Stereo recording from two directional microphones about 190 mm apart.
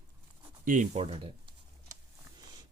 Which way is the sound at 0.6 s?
45° right (ahead or behind).